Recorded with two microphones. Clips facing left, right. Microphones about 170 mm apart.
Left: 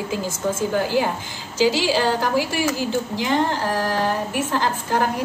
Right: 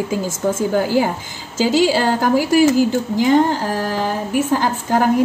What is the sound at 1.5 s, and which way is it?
A woman's voice, 50° right (ahead or behind).